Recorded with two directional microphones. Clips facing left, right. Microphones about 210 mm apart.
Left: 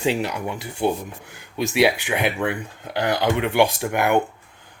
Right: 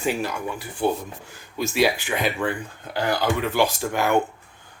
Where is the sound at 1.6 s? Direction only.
70° left (ahead or behind).